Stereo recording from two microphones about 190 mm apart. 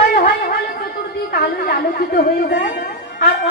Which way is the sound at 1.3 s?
55° left (ahead or behind).